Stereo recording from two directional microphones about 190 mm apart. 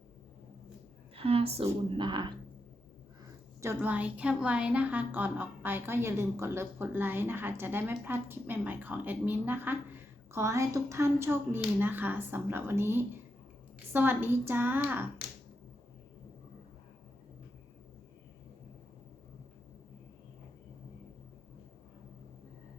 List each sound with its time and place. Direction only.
1.1 s a sound: 30° right (ahead or behind)
1.6 s speech: 25° right (ahead or behind)
3.6 s a woman's voice: 10° right (ahead or behind)